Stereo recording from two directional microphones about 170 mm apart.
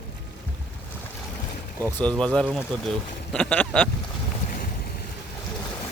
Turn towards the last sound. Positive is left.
turn(degrees=55)  # may be behind; listen again after turning